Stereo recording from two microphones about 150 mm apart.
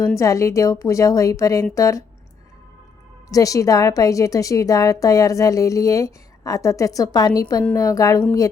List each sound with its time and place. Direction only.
0.2 s a woman's voice: 20° left (ahead or behind)
3.3 s a woman's voice: 20° left (ahead or behind)